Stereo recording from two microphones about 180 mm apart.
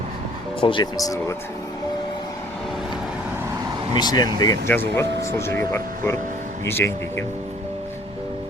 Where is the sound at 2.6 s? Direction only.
Centre (ahead or behind).